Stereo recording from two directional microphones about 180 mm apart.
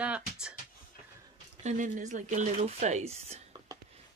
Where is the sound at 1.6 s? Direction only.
45° right (ahead or behind).